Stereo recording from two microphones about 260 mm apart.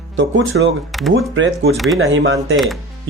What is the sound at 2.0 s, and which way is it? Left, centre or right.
Speech, right.